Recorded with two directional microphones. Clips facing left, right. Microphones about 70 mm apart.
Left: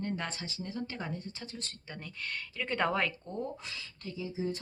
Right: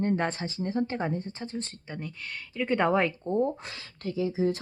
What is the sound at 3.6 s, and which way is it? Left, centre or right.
Speech, right.